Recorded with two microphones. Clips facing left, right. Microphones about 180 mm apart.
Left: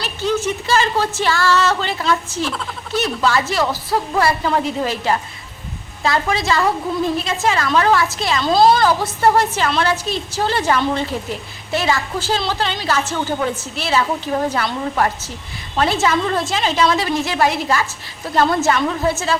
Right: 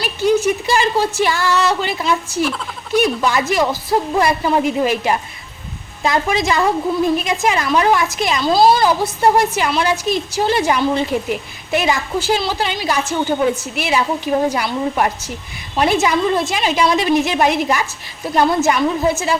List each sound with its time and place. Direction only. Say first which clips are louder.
0.0 s speech: right 5 dB; 10° right (ahead or behind)